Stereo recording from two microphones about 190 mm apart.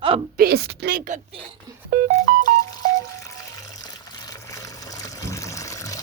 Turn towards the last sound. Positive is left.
turn(degrees=15)  # may be behind; listen again after turning